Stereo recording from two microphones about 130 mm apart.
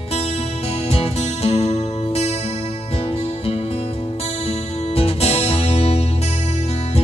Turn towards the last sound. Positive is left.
turn(degrees=50)  # may be behind; listen again after turning